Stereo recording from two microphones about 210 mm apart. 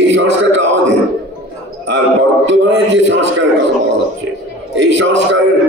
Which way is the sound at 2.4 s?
60° right (ahead or behind).